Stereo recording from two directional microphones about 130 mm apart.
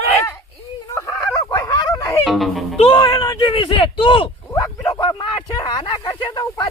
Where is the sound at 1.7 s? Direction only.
25° left (ahead or behind).